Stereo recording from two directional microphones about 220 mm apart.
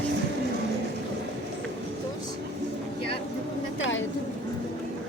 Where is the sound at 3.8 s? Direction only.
60° left (ahead or behind).